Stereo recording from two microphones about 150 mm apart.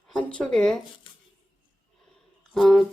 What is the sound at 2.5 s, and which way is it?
Speech, centre (ahead or behind).